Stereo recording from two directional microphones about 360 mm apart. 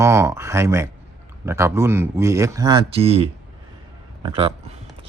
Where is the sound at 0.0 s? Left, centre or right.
Centre.